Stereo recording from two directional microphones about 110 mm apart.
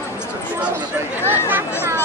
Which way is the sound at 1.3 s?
20° right (ahead or behind).